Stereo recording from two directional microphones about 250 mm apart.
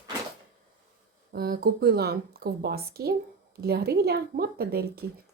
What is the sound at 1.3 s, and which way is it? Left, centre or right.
A woman's voice, right.